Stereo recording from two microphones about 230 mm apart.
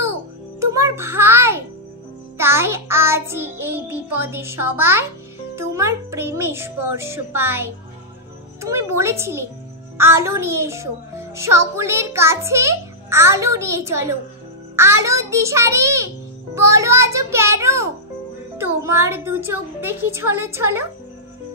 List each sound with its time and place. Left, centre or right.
0.6 s music: centre
2.3 s speech: centre